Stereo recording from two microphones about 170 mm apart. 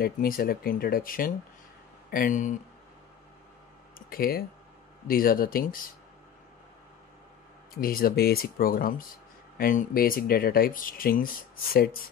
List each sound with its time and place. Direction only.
0.0 s speech: 60° left (ahead or behind)
4.1 s speech: 60° left (ahead or behind)
7.7 s speech: 60° left (ahead or behind)